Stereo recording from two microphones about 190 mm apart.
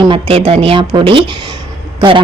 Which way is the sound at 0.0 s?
30° right (ahead or behind).